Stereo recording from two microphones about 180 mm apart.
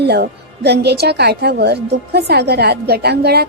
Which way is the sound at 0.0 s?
65° right (ahead or behind).